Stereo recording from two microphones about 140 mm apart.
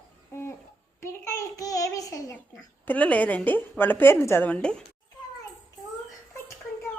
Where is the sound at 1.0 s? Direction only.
20° left (ahead or behind).